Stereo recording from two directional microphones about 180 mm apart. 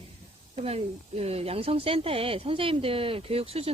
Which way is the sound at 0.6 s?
35° right (ahead or behind).